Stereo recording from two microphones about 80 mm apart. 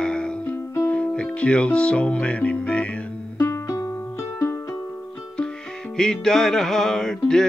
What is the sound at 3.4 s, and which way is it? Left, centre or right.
Music, left.